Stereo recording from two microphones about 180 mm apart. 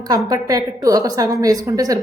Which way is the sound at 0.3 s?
20° right (ahead or behind).